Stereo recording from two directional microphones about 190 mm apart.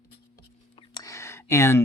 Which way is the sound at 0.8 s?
20° left (ahead or behind).